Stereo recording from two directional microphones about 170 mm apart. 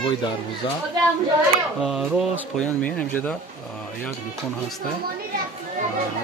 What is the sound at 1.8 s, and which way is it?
Speech, 5° right (ahead or behind).